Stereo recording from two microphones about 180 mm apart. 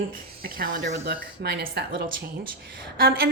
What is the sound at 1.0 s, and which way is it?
A woman's voice, 60° right (ahead or behind).